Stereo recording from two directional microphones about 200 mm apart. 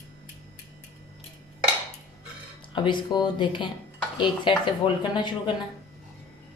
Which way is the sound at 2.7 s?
20° left (ahead or behind).